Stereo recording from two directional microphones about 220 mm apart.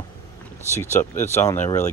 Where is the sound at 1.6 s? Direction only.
35° left (ahead or behind).